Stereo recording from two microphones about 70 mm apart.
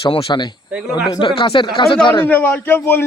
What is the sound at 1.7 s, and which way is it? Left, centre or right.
Speech, centre.